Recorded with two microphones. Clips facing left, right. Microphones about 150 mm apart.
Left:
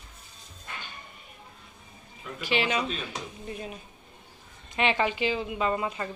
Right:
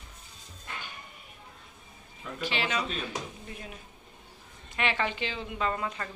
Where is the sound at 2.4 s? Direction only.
15° left (ahead or behind).